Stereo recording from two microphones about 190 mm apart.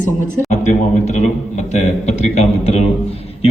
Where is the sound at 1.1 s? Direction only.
40° left (ahead or behind).